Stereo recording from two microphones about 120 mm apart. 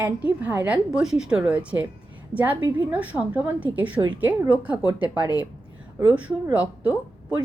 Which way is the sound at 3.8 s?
45° right (ahead or behind).